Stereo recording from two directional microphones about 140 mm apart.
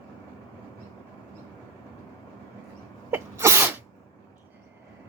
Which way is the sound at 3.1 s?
20° right (ahead or behind).